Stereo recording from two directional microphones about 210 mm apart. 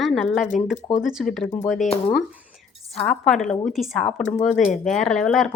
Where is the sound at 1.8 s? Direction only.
30° left (ahead or behind).